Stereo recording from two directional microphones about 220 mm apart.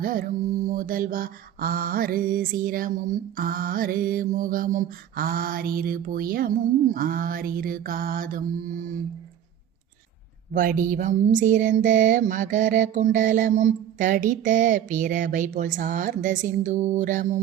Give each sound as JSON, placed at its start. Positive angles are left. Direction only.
{"t": 0.0, "sound": "mantra", "side_deg": -40}
{"t": 10.5, "sound": "mantra", "side_deg": -40}